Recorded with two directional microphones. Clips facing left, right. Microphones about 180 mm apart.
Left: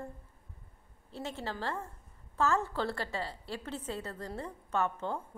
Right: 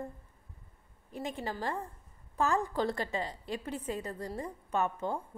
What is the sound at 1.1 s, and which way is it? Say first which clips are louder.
A woman's voice: right 2 dB; 15° right (ahead or behind).